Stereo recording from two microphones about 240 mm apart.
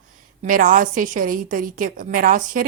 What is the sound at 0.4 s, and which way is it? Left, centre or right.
Speech, right.